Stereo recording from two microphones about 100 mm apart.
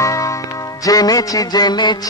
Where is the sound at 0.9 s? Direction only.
40° left (ahead or behind).